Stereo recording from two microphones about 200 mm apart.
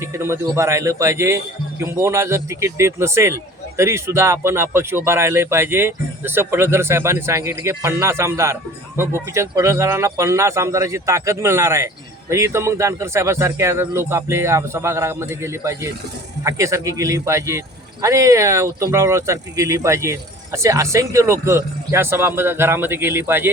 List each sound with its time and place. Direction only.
0.0 s speech: 15° right (ahead or behind)